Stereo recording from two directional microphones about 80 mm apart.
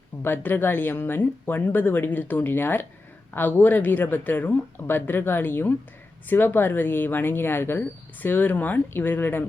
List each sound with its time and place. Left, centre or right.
0.2 s speech: left